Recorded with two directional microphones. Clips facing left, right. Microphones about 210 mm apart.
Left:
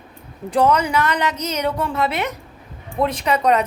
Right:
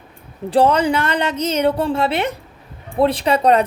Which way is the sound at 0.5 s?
30° right (ahead or behind).